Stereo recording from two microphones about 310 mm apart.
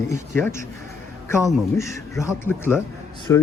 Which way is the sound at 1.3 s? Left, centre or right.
Centre.